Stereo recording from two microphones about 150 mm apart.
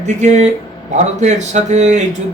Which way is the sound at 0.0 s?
50° right (ahead or behind).